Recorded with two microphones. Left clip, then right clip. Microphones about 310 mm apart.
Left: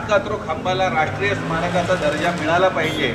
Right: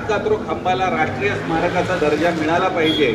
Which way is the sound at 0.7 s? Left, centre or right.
Centre.